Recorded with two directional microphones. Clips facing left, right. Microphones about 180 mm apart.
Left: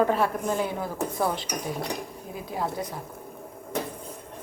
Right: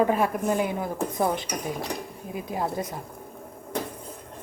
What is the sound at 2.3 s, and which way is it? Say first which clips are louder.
Speech: right 2 dB; 15° right (ahead or behind).